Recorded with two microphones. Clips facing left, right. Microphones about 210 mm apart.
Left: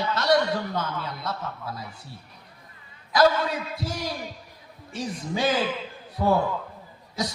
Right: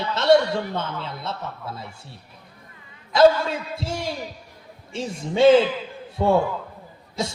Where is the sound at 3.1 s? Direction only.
25° right (ahead or behind).